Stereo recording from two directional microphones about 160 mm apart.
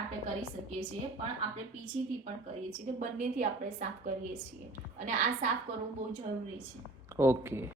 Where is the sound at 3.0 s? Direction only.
50° right (ahead or behind).